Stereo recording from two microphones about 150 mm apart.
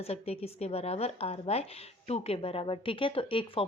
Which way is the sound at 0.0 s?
40° left (ahead or behind).